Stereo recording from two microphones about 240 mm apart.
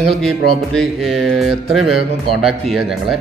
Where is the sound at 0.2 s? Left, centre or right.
Centre.